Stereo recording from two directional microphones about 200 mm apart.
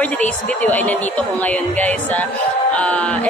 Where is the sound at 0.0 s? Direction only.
5° left (ahead or behind).